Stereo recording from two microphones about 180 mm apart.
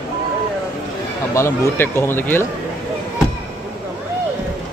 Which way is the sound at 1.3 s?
15° left (ahead or behind).